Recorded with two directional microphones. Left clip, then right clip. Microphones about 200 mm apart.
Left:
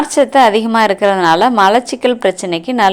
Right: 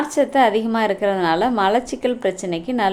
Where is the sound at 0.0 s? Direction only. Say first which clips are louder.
Left 7 dB; 15° left (ahead or behind).